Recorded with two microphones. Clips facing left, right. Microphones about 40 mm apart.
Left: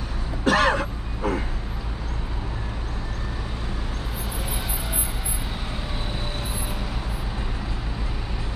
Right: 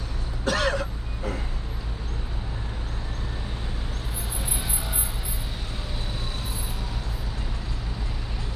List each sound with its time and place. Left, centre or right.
0.5 s throat clearing: left